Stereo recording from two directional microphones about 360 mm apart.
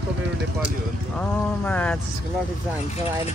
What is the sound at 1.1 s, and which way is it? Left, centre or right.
Speech, centre.